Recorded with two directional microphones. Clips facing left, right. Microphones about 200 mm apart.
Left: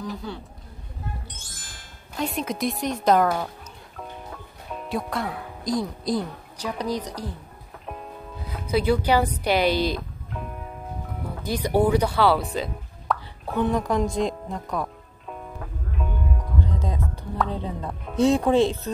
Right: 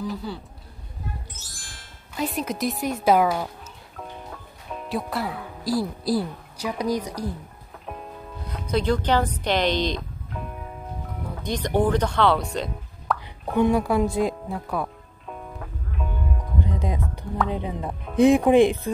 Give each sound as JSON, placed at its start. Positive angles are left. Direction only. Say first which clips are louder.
{"t": 0.0, "sound": "speech", "louder": "right 2 dB", "side_deg": 0}
{"t": 2.1, "sound": "speech", "louder": "even", "side_deg": 0}
{"t": 3.9, "sound": "music", "louder": "even", "side_deg": 0}
{"t": 7.8, "sound": "music", "louder": "even", "side_deg": 0}
{"t": 9.4, "sound": "speech", "louder": "left 1 dB", "side_deg": 10}
{"t": 13.6, "sound": "music", "louder": "right 3 dB", "side_deg": -10}
{"t": 16.6, "sound": "music", "louder": "right 2 dB", "side_deg": -15}
{"t": 17.5, "sound": "speech", "louder": "right 2 dB", "side_deg": -15}